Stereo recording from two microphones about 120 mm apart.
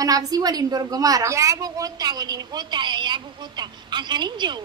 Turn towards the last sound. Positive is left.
turn(degrees=-40)  # may be behind; listen again after turning